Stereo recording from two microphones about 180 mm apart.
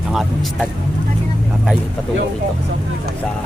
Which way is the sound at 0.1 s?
Centre (ahead or behind).